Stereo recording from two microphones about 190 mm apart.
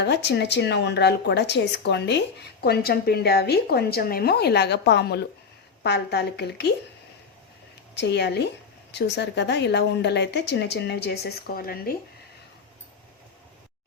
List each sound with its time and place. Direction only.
0.0 s a woman's voice: 65° left (ahead or behind)
7.9 s a woman's voice: 65° left (ahead or behind)